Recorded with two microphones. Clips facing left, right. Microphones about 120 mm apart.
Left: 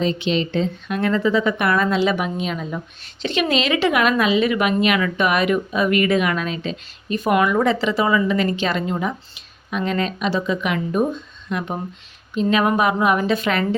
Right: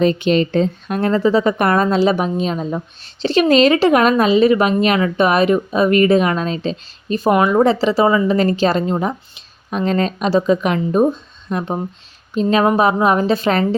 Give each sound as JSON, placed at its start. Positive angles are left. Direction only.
{"t": 0.0, "sound": "a woman's voice", "side_deg": -50}